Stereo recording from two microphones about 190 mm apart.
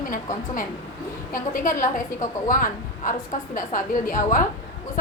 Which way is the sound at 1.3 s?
45° left (ahead or behind).